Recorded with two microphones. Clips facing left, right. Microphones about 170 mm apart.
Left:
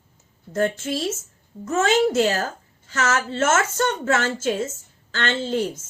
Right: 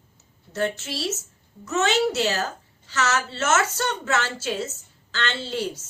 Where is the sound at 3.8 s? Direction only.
45° left (ahead or behind).